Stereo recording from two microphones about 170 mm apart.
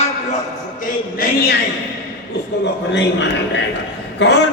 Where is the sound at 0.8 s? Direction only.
60° left (ahead or behind).